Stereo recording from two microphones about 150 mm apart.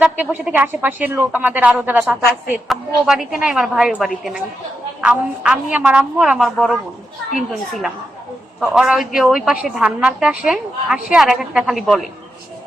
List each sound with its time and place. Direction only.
0.0 s a woman's voice: 5° right (ahead or behind)
4.9 s a woman's voice: 5° right (ahead or behind)